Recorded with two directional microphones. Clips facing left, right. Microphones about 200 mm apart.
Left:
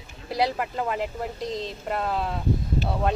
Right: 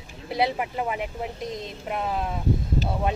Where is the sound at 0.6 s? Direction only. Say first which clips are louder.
Left 1 dB; 10° right (ahead or behind).